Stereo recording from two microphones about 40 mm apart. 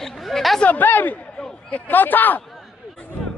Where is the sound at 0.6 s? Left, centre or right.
Left.